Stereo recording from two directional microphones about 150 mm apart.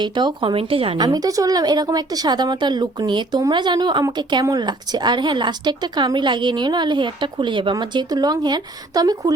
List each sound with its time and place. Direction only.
0.0 s a woman's voice: 30° right (ahead or behind)